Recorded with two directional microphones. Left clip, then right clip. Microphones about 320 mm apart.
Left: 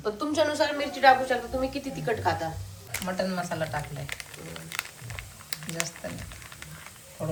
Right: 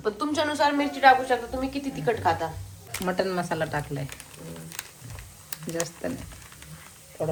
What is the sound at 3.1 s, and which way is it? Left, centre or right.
Speech, right.